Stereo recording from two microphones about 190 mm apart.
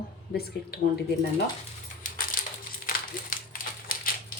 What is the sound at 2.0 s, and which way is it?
Crushing, 40° left (ahead or behind).